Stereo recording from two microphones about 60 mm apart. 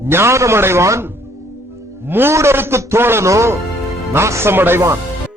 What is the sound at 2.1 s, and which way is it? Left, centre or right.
Speech, right.